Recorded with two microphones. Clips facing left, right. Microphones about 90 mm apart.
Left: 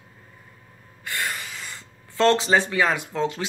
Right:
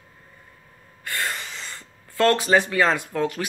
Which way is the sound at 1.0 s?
20° left (ahead or behind).